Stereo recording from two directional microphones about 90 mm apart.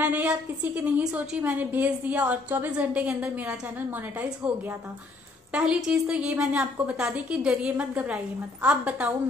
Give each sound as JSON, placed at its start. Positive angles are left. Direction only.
{"t": 0.0, "sound": "a woman's voice", "side_deg": -15}